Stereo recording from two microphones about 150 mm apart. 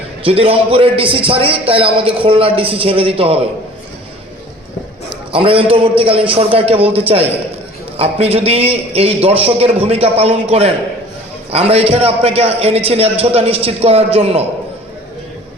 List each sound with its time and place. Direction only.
0.3 s a man's voice: 40° right (ahead or behind)
5.0 s a man's voice: 35° right (ahead or behind)